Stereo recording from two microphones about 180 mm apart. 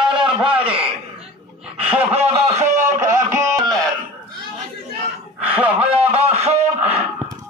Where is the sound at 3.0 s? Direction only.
15° right (ahead or behind).